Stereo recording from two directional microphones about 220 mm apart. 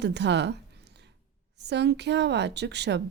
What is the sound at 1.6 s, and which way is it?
Speech, 50° right (ahead or behind).